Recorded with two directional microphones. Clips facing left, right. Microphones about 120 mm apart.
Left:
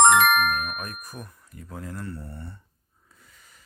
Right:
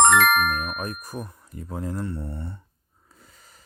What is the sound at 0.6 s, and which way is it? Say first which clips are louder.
Speech: right 3 dB; 30° right (ahead or behind).